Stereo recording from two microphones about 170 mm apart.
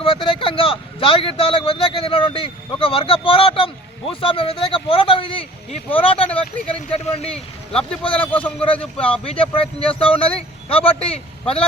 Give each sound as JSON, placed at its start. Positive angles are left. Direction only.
{"t": 0.0, "sound": "speech", "side_deg": 30}
{"t": 6.2, "sound": "speech", "side_deg": 10}
{"t": 6.9, "sound": "speech", "side_deg": 35}
{"t": 7.9, "sound": "a man's voice", "side_deg": 5}
{"t": 9.0, "sound": "speech", "side_deg": 30}